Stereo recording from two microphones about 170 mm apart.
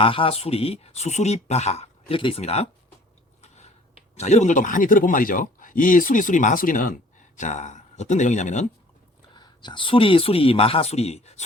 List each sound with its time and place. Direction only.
0.0 s speech: 30° left (ahead or behind)
3.4 s chewing: 40° left (ahead or behind)
4.1 s speech: 40° left (ahead or behind)
9.3 s speech: 25° left (ahead or behind)